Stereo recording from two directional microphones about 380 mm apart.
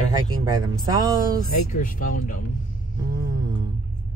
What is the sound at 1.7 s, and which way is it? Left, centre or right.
Speech, left.